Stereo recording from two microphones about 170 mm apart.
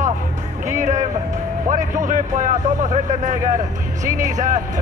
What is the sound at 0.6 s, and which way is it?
Speech, 45° right (ahead or behind).